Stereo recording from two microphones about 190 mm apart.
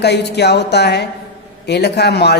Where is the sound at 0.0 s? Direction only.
60° left (ahead or behind).